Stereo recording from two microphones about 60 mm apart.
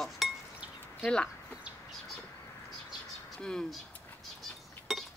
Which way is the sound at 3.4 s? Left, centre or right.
Centre.